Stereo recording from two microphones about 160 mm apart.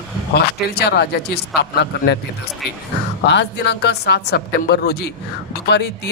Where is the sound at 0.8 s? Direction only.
90° left.